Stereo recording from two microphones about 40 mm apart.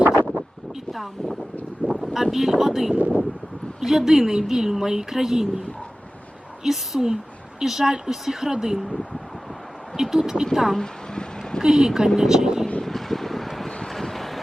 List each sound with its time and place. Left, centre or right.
1.9 s speech: centre
2.9 s speech: right
3.8 s speech: centre
6.6 s speech: centre
10.8 s a sound: centre
11.6 s speech: centre
12.8 s vehicle: centre
13.7 s vehicle: centre
13.9 s vehicle: centre